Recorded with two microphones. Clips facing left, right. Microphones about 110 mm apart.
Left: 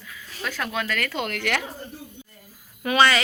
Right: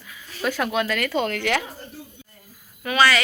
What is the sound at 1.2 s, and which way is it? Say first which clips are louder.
Speech: right 3 dB; 5° left (ahead or behind).